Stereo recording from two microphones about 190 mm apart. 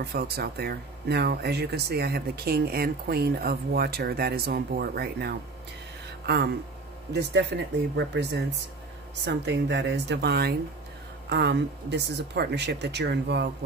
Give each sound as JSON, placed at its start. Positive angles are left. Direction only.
{"t": 0.0, "sound": "speech", "side_deg": -55}